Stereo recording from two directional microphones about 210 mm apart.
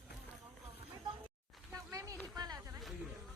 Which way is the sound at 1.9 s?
15° right (ahead or behind).